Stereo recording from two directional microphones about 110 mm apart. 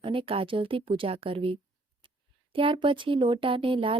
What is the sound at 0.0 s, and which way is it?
A woman's voice, 50° right (ahead or behind).